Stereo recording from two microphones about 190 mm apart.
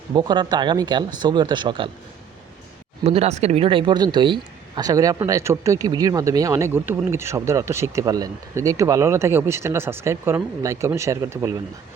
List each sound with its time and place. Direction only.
0.1 s speech: 20° right (ahead or behind)
3.0 s speech: 35° right (ahead or behind); by 11.6 s 15° right (ahead or behind)